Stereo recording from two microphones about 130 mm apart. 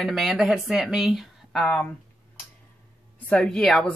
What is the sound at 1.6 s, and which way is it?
Speech, 10° left (ahead or behind).